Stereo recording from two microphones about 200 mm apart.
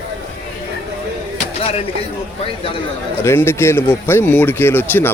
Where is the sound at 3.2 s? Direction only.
10° left (ahead or behind).